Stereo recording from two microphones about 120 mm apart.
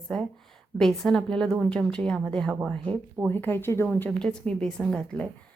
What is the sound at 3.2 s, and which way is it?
A woman's voice, 15° left (ahead or behind).